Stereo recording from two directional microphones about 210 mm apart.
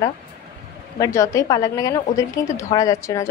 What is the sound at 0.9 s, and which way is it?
A woman's voice, 15° left (ahead or behind).